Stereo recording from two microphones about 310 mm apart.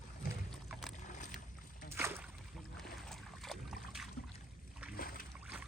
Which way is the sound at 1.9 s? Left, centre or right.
Centre.